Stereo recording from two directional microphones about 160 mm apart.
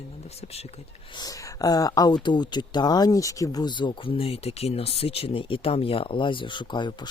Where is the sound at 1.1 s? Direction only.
25° left (ahead or behind).